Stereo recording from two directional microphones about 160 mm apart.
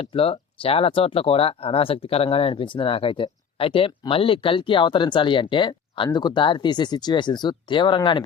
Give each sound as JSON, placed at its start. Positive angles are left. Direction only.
{"t": 0.0, "sound": "speech", "side_deg": 35}